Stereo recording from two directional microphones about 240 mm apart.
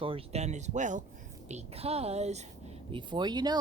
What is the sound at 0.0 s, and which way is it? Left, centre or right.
A woman's voice, right.